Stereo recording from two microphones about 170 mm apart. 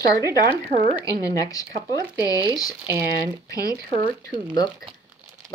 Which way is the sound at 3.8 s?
65° right (ahead or behind).